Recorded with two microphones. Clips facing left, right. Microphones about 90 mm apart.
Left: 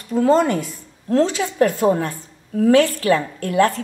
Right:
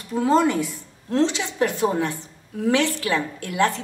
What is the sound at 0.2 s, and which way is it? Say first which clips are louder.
A woman's voice: left 3 dB; 50° left (ahead or behind).